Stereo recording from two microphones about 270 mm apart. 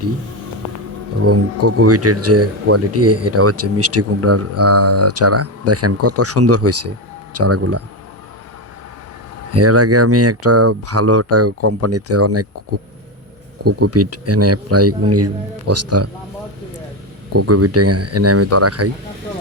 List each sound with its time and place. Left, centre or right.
1.2 s speech: right
9.5 s speech: right
13.7 s speech: right
17.3 s speech: right